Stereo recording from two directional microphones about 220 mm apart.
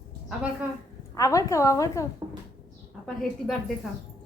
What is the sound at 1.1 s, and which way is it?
Speech, 15° left (ahead or behind).